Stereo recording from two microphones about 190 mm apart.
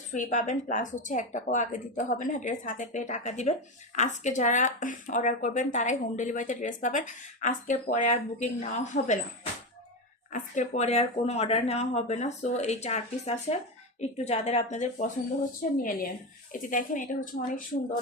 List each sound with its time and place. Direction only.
0.1 s speech: 40° left (ahead or behind)